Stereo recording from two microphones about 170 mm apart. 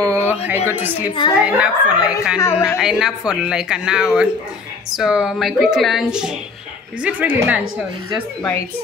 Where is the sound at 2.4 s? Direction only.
15° left (ahead or behind).